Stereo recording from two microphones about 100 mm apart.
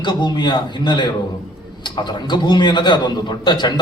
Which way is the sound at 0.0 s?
50° left (ahead or behind).